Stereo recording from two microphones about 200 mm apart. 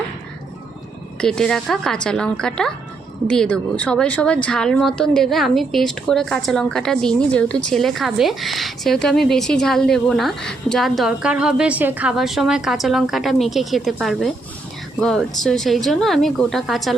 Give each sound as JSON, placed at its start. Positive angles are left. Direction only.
{"t": 1.2, "sound": "a woman's voice", "side_deg": 5}